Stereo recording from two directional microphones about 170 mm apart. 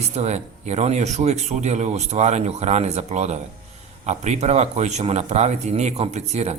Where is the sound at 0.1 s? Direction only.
40° right (ahead or behind).